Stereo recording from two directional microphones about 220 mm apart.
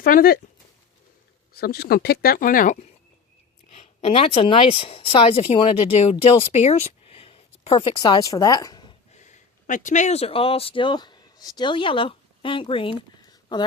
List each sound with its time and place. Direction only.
0.0 s speech: 40° left (ahead or behind)
1.5 s speech: 45° left (ahead or behind); by 9.0 s 20° left (ahead or behind)
9.1 s speech: 35° left (ahead or behind)